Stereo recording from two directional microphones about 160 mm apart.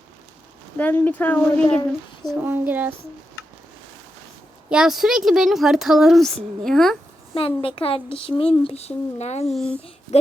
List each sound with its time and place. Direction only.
0.8 s speech: 10° left (ahead or behind)
2.4 s speech: 10° right (ahead or behind)
4.7 s speech: 5° right (ahead or behind)
7.3 s speech: 35° left (ahead or behind)
9.5 s speech: centre (ahead or behind)